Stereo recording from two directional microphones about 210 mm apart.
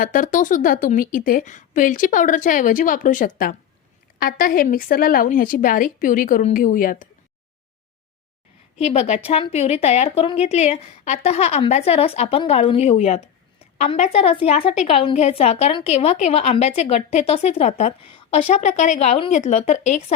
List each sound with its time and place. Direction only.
0.0 s a woman's voice: 40° left (ahead or behind)
8.8 s a woman's voice: 30° left (ahead or behind)